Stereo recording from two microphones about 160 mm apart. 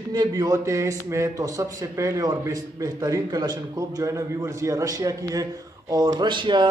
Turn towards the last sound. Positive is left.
turn(degrees=-30)  # may be behind; listen again after turning